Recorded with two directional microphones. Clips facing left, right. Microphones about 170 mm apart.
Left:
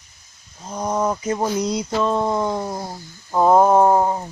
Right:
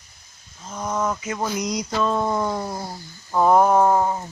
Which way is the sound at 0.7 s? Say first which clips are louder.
Left 3 dB; 30° left (ahead or behind).